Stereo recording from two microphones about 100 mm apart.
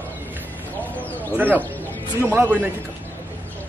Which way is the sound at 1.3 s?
15° right (ahead or behind).